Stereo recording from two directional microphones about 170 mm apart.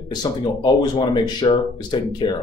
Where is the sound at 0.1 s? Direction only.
25° left (ahead or behind).